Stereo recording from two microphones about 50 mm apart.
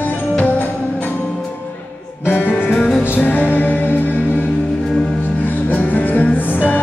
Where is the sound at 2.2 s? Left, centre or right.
Left.